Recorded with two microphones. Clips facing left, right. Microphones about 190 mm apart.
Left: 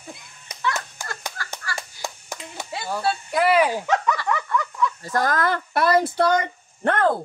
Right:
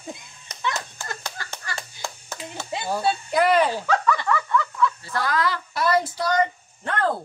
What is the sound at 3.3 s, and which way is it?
Speech, 5° left (ahead or behind).